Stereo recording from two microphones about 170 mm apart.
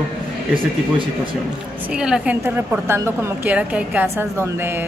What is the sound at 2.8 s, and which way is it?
A woman's voice, 15° right (ahead or behind).